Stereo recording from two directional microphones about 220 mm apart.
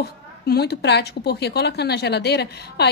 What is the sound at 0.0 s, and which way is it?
A woman's voice, 45° left (ahead or behind).